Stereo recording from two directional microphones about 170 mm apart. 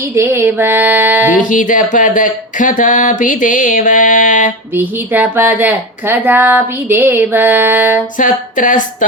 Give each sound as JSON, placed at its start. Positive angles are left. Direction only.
{"t": 0.1, "sound": "speech", "side_deg": -15}
{"t": 1.4, "sound": "speech", "side_deg": 50}
{"t": 4.7, "sound": "speech", "side_deg": -10}
{"t": 8.2, "sound": "speech", "side_deg": 50}